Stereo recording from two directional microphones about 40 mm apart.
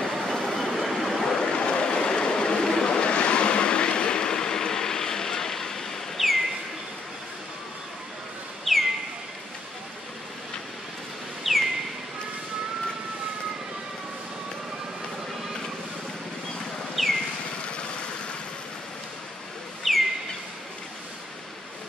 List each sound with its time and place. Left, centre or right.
0.0 s vehicle: centre
0.5 s waves: centre
6.2 s bird: centre
8.7 s bird: centre
11.4 s bird: centre
16.9 s a sound: centre
19.9 s bird: centre